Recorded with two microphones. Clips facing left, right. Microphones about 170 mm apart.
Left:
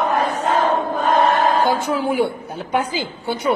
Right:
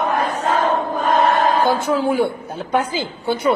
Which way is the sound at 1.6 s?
15° left (ahead or behind).